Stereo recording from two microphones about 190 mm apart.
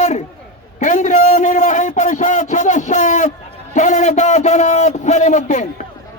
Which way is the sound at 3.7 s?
40° left (ahead or behind).